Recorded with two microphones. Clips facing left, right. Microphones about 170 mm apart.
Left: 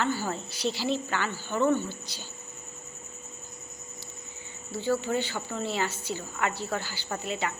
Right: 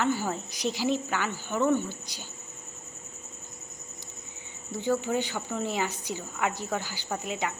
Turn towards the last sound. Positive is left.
turn(degrees=-15)  # may be behind; listen again after turning